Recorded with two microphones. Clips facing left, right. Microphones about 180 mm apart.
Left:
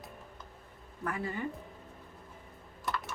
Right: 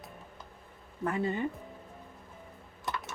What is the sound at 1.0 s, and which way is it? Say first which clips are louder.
Speech: right 5 dB; 25° right (ahead or behind).